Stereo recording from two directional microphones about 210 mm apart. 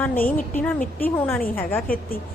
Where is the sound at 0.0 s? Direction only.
10° left (ahead or behind).